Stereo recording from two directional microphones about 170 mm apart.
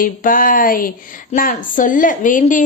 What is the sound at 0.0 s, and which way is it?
A child's voice, 55° left (ahead or behind).